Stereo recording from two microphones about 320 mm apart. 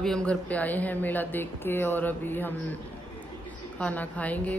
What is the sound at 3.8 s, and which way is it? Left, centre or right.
Speech, centre.